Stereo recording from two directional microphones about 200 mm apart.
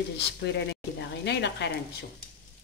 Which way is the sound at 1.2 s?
60° left (ahead or behind).